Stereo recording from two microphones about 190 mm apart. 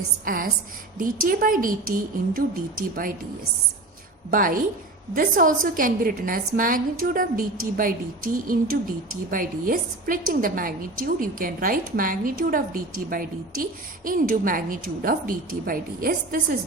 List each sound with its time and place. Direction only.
0.3 s a woman's voice: 50° right (ahead or behind)
4.3 s a woman's voice: 45° right (ahead or behind)